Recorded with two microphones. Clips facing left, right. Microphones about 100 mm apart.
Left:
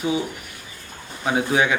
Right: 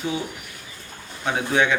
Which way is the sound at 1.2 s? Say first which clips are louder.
Left 1 dB; 5° left (ahead or behind).